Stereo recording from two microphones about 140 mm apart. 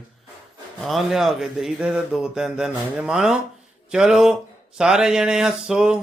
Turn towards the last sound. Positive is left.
turn(degrees=-5)  # may be behind; listen again after turning